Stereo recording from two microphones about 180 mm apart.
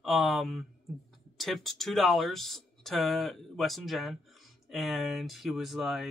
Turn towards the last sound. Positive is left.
turn(degrees=0)  # may be behind; listen again after turning